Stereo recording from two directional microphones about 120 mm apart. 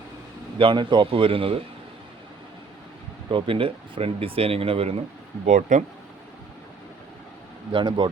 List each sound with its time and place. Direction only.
0.6 s speech: 40° right (ahead or behind)
3.2 s speech: 45° right (ahead or behind)
5.5 s speech: 90° right
7.7 s speech: 40° right (ahead or behind)